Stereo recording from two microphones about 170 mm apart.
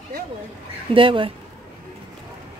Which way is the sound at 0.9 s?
30° right (ahead or behind).